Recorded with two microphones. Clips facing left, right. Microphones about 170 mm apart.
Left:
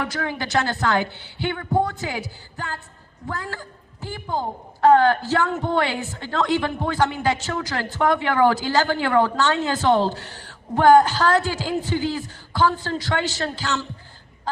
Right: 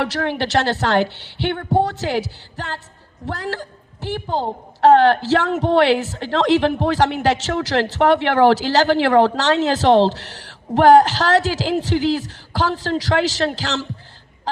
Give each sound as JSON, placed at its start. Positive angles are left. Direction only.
{"t": 0.0, "sound": "a woman's voice", "side_deg": -75}